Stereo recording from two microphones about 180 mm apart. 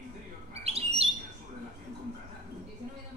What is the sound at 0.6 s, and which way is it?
Bird, 35° right (ahead or behind).